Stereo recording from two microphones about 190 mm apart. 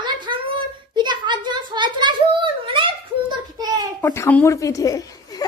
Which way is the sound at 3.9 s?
15° left (ahead or behind).